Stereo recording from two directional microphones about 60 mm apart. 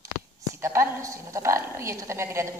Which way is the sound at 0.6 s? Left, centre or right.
Right.